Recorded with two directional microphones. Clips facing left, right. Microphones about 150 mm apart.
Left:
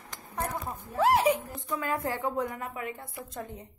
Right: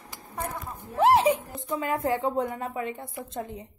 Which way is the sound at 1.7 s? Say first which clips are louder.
Right 5 dB; 20° right (ahead or behind).